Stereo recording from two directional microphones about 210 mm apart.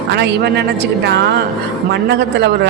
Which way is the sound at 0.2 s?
55° right (ahead or behind).